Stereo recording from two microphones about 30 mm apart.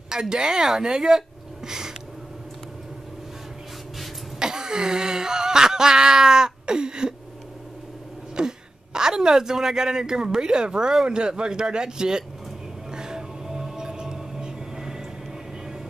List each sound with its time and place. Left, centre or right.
0.1 s speech: right
4.4 s a sound: right
8.4 s speech: right
12.9 s music: right